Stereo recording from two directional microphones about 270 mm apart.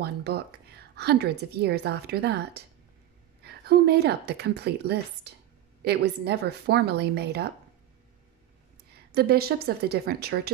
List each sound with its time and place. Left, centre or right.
0.0 s a woman's voice: right
8.9 s a woman's voice: right